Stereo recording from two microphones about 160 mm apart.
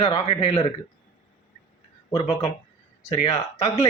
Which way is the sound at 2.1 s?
40° left (ahead or behind).